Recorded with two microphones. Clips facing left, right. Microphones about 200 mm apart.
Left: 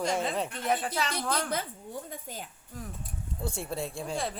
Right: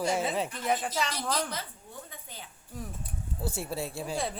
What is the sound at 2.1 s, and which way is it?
Speech, 45° left (ahead or behind).